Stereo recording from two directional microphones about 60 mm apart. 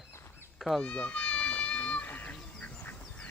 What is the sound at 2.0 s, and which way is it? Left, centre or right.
Duck, left.